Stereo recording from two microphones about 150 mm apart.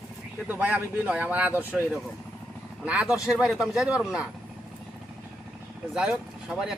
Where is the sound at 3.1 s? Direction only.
20° left (ahead or behind).